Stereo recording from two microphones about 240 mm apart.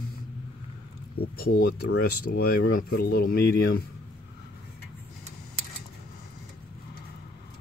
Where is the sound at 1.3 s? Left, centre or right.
Left.